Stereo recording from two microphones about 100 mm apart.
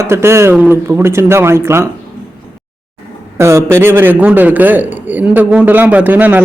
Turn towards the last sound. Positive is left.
turn(degrees=-15)  # may be behind; listen again after turning